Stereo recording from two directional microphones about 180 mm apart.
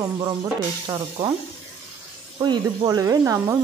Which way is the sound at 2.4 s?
20° right (ahead or behind).